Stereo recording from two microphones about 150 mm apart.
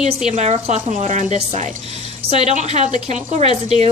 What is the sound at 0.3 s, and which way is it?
A woman's voice, 50° right (ahead or behind).